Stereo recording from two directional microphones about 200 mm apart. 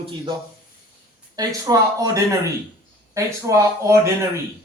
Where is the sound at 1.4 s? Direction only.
15° right (ahead or behind).